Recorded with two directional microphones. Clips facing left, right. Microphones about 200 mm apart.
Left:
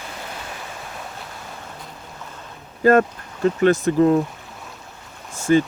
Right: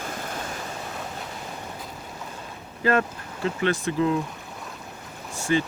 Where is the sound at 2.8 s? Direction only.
45° left (ahead or behind).